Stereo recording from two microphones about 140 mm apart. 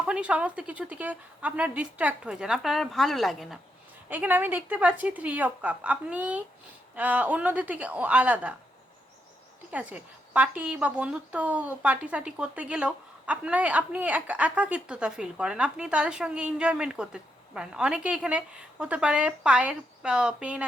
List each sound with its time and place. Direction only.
0.0 s a woman's voice: 10° right (ahead or behind)
4.1 s a woman's voice: 10° right (ahead or behind)
9.7 s a woman's voice: 10° right (ahead or behind)